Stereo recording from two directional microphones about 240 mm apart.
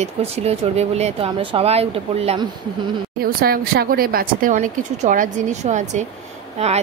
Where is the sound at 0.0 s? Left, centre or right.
Right.